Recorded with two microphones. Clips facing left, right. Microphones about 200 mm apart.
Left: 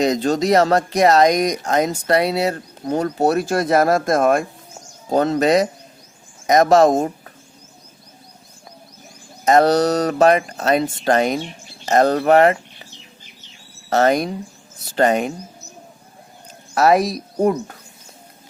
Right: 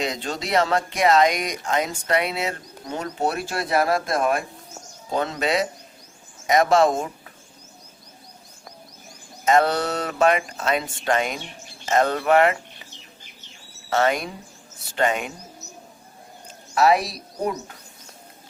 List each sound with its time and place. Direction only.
0.0 s speech: 40° left (ahead or behind)
9.4 s speech: 40° left (ahead or behind)
13.9 s speech: 40° left (ahead or behind)
16.7 s speech: 45° left (ahead or behind)